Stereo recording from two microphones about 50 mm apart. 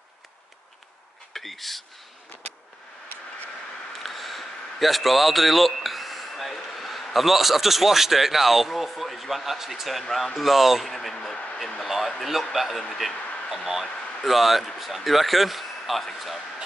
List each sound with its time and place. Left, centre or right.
1.3 s speech: centre
3.9 s a man's voice: centre
11.5 s a sound: centre
11.8 s speech: centre
14.2 s speech: centre